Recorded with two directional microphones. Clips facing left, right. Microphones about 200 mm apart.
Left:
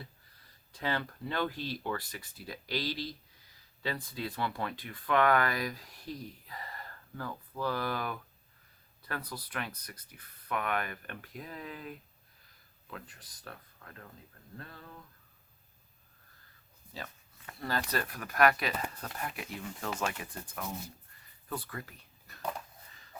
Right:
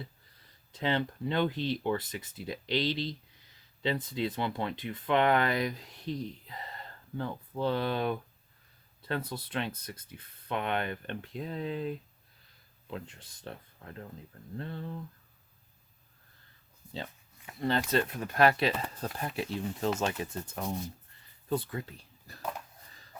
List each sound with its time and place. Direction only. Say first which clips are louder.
0.7 s speech: right 4 dB; 20° right (ahead or behind)
17.6 s speech: right 6 dB; 25° right (ahead or behind)
22.4 s a sound: even; 5° right (ahead or behind)